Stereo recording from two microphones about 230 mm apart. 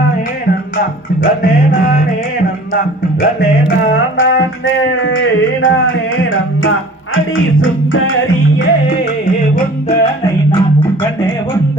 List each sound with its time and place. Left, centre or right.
0.8 s music: left
3.9 s music: left
9.2 s music: left